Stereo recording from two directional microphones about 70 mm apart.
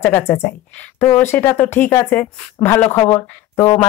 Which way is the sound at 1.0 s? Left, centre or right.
Left.